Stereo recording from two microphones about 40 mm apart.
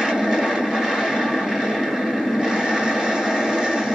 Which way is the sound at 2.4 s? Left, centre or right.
Centre.